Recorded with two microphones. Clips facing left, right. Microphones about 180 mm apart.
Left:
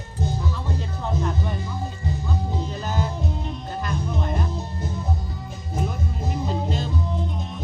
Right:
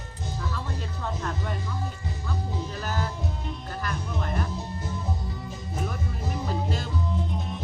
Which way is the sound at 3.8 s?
20° left (ahead or behind).